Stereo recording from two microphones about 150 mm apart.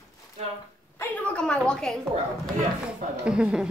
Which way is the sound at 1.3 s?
5° left (ahead or behind).